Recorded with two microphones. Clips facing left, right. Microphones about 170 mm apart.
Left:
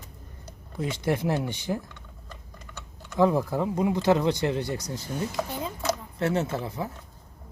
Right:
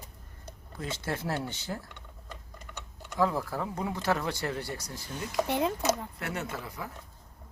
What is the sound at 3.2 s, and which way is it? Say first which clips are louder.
Speech: left 6 dB; 20° left (ahead or behind).